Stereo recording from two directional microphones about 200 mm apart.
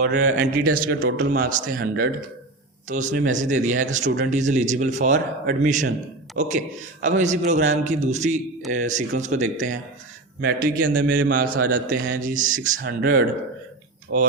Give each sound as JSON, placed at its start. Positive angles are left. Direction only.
{"t": 0.3, "sound": "a man's voice", "side_deg": -45}